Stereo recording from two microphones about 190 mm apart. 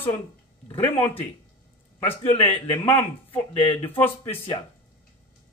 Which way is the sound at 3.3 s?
30° left (ahead or behind).